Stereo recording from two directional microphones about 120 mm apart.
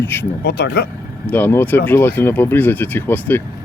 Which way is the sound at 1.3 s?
20° left (ahead or behind).